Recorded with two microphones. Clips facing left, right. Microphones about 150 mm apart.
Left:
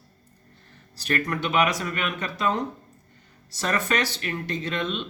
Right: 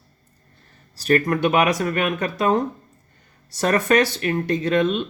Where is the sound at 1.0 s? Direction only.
40° right (ahead or behind).